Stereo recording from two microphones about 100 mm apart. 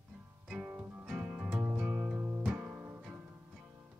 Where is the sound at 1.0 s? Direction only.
10° right (ahead or behind).